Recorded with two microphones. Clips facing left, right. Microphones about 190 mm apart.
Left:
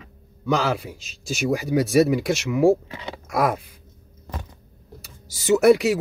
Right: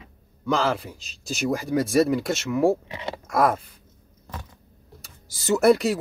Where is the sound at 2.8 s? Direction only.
15° right (ahead or behind).